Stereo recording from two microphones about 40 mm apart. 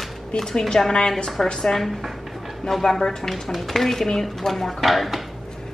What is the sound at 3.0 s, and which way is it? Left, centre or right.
Speech, centre.